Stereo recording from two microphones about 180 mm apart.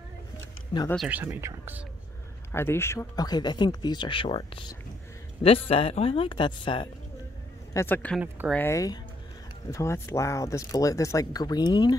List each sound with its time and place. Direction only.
0.9 s speech: 5° right (ahead or behind)
2.5 s speech: 15° left (ahead or behind)
7.7 s speech: 10° left (ahead or behind)